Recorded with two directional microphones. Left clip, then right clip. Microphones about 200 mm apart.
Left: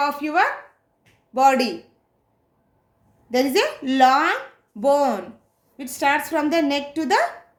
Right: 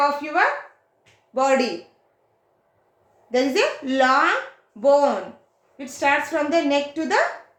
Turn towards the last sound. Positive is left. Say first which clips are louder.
# even
turn(degrees=55)  # may be behind; listen again after turning